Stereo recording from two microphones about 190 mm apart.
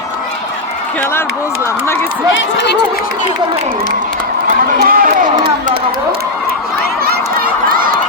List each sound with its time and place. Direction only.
4.8 s speech: 50° right (ahead or behind)